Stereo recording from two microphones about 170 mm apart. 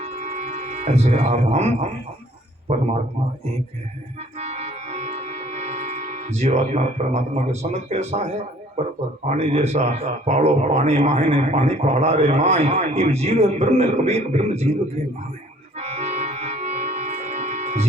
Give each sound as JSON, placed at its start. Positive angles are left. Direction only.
{"t": 0.0, "sound": "music", "side_deg": -40}
{"t": 2.7, "sound": "a man's voice", "side_deg": -40}
{"t": 4.4, "sound": "music", "side_deg": -40}
{"t": 9.3, "sound": "a man's voice", "side_deg": -40}
{"t": 15.8, "sound": "music", "side_deg": -40}